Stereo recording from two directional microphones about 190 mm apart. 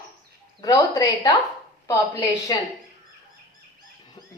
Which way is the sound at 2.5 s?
20° left (ahead or behind).